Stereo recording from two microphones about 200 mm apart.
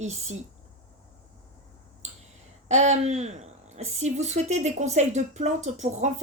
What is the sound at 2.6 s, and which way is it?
A woman's voice, 35° right (ahead or behind).